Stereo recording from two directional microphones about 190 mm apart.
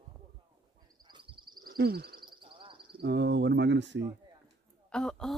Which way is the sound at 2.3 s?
25° right (ahead or behind).